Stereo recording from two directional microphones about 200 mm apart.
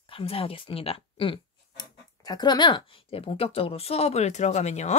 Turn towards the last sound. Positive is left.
turn(degrees=35)  # may be behind; listen again after turning